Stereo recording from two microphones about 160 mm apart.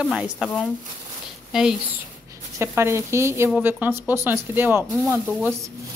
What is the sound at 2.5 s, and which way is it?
A woman's voice, 15° right (ahead or behind).